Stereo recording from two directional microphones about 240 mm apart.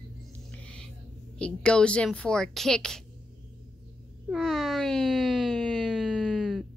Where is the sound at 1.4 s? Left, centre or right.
Centre.